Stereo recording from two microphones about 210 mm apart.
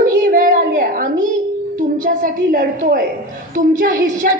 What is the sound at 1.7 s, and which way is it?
A woman's voice, 40° right (ahead or behind).